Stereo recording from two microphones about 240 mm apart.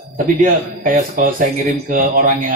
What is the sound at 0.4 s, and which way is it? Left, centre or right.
Speech, right.